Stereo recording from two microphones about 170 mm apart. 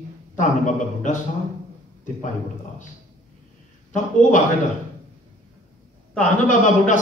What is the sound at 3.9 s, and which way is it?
Speech, 45° left (ahead or behind).